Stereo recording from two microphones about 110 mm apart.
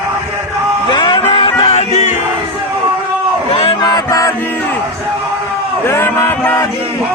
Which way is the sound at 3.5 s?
60° left (ahead or behind).